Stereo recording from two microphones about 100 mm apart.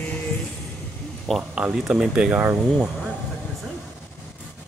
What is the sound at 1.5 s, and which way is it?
Speech, 5° right (ahead or behind).